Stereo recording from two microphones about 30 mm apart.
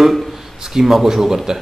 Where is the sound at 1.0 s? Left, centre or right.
Centre.